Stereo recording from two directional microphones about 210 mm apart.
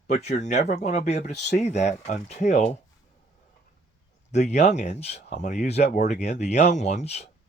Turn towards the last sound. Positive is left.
turn(degrees=30)  # may be behind; listen again after turning